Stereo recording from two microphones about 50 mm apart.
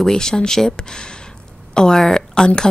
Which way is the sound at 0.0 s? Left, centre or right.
Centre.